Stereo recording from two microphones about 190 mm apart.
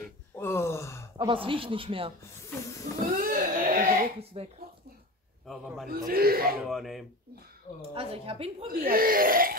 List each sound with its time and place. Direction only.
0.4 s speech: 15° left (ahead or behind)
1.1 s speech: 25° right (ahead or behind)
3.2 s a sound: 45° right (ahead or behind)
4.2 s speech: 30° right (ahead or behind)
5.9 s speech: 50° right (ahead or behind)
6.6 s speech: centre (ahead or behind)
7.9 s speech: 30° right (ahead or behind)
8.7 s speech: 50° right (ahead or behind)